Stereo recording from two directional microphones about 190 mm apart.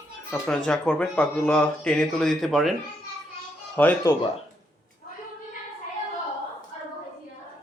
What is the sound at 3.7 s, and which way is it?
Speech, 10° left (ahead or behind).